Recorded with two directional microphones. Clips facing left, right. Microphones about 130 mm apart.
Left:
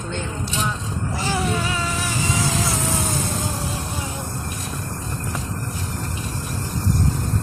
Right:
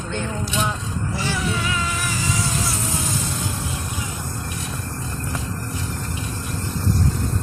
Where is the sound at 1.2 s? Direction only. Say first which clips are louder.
Left 3 dB; 40° left (ahead or behind).